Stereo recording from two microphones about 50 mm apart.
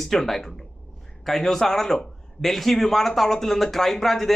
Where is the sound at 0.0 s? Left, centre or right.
Centre.